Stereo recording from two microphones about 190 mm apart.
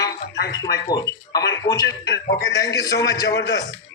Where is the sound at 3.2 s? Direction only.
65° left (ahead or behind).